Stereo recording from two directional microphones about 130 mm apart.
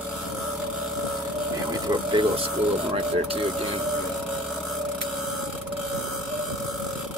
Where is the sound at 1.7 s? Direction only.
35° right (ahead or behind).